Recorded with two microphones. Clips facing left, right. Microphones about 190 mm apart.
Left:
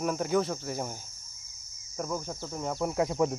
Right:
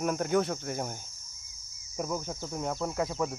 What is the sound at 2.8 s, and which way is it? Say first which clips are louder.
Speech: left 6 dB; 15° left (ahead or behind).